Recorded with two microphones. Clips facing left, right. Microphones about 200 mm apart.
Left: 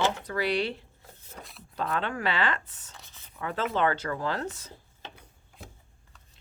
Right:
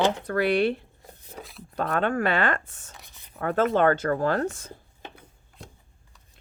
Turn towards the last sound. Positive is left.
turn(degrees=5)  # may be behind; listen again after turning